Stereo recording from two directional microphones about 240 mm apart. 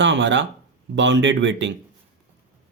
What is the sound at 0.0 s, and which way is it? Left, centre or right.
A man's voice, right.